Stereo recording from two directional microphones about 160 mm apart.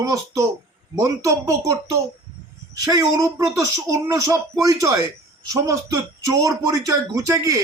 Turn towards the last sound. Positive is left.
turn(degrees=-20)  # may be behind; listen again after turning